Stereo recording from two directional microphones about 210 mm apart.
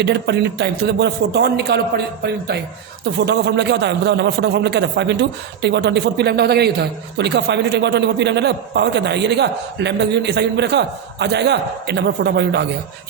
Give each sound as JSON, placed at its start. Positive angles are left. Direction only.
{"t": 0.0, "sound": "a man's voice", "side_deg": -55}